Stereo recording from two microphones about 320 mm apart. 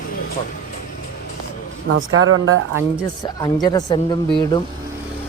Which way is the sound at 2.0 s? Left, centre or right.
Right.